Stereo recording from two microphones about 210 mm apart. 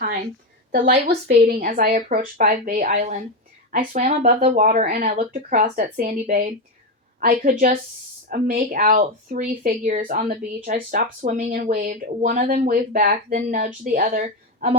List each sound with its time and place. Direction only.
1.1 s speech: 45° right (ahead or behind)